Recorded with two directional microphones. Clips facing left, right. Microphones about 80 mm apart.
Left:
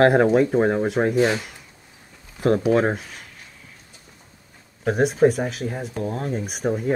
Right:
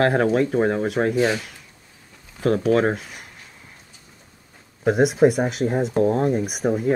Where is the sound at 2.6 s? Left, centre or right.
Centre.